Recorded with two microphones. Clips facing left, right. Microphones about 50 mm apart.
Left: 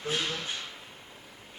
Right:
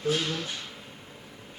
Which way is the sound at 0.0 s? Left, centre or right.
Centre.